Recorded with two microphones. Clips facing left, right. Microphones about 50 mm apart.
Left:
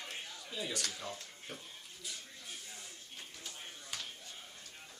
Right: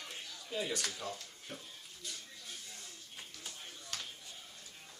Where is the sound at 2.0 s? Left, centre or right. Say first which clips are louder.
Even; centre.